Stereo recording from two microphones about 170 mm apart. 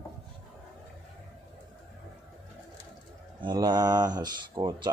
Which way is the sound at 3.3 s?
25° right (ahead or behind).